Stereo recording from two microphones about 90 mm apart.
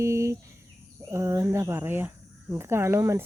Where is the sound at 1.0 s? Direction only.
35° right (ahead or behind).